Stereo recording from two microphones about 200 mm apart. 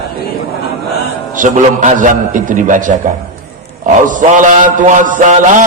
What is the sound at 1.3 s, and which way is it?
Mantra, 40° right (ahead or behind).